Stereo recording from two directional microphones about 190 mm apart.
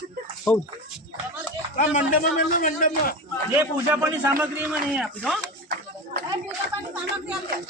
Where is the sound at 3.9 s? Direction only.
10° right (ahead or behind).